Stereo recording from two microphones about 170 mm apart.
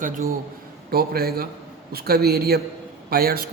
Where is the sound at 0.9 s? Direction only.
65° right (ahead or behind).